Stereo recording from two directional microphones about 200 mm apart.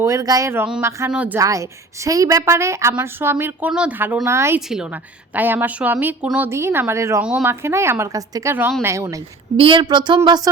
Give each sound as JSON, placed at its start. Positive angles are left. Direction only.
{"t": 0.0, "sound": "a woman's voice", "side_deg": -15}